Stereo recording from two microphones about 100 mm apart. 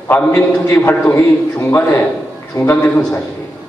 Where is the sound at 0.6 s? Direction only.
15° left (ahead or behind).